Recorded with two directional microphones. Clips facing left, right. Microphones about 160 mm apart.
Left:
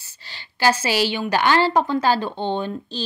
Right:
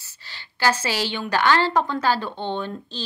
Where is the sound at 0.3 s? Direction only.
15° left (ahead or behind).